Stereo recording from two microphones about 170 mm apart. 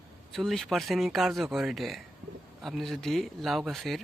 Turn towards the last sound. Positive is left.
turn(degrees=0)  # may be behind; listen again after turning